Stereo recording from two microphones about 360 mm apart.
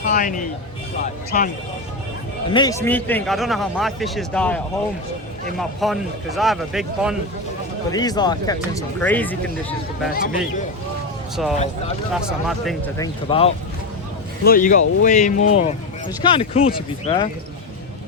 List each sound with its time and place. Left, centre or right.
0.1 s speech: left
2.5 s speech: centre
7.9 s speech: centre
11.4 s speech: centre
13.0 s speech: centre